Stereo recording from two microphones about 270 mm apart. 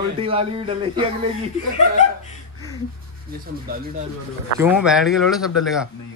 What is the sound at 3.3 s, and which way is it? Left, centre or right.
Speech, right.